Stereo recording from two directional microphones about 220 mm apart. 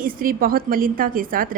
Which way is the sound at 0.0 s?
40° right (ahead or behind).